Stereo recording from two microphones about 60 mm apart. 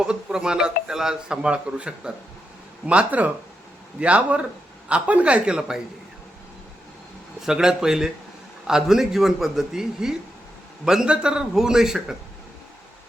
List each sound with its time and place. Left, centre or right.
0.0 s a man's voice: centre
7.4 s a man's voice: centre